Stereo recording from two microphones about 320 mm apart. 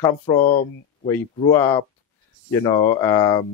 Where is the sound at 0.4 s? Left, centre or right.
Left.